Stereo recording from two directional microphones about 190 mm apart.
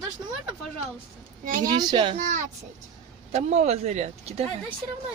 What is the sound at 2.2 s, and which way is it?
Speech, 40° right (ahead or behind).